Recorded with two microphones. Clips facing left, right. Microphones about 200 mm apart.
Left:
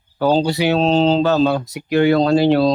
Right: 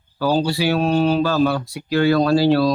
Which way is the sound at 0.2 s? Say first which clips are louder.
Left 3 dB; 20° left (ahead or behind).